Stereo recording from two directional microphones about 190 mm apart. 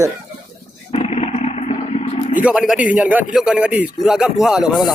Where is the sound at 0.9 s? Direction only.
35° left (ahead or behind).